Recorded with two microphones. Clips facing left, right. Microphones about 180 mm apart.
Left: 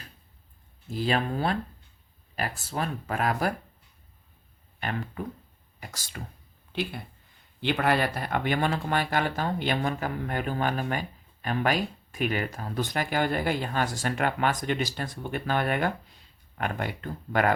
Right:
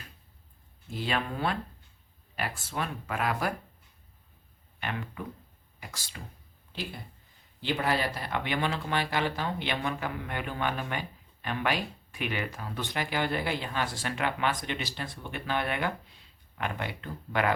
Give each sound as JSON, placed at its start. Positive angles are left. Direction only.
{"t": 0.9, "sound": "speech", "side_deg": 40}
{"t": 4.8, "sound": "speech", "side_deg": 40}
{"t": 7.6, "sound": "speech", "side_deg": 65}